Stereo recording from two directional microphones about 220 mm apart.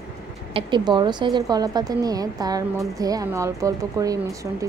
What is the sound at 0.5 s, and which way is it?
A woman's voice, 20° right (ahead or behind).